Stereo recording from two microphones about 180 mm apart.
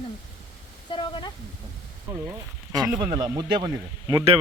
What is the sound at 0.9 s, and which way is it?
Speech, 25° left (ahead or behind).